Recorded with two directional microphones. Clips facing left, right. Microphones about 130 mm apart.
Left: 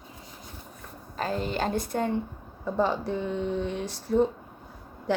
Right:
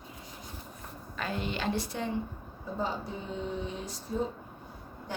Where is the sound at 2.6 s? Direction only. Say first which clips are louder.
Left 8 dB; 75° left (ahead or behind).